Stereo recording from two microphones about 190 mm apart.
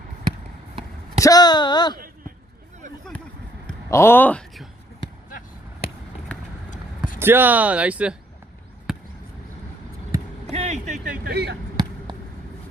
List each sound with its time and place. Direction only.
1.2 s a sound: 20° left (ahead or behind)
3.8 s speech: 15° left (ahead or behind)
7.2 s speech: 10° right (ahead or behind)
10.5 s speech: 35° right (ahead or behind)
11.3 s speech: 60° right (ahead or behind)